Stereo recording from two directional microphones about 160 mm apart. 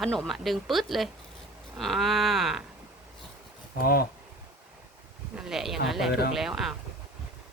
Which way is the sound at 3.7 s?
70° left (ahead or behind).